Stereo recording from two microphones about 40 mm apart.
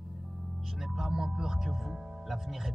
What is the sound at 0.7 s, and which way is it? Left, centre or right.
Speech, centre.